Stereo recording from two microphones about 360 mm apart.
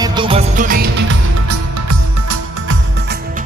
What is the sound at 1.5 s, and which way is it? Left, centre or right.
Music, right.